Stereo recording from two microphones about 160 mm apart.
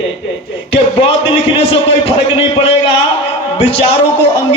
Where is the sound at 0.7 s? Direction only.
30° left (ahead or behind).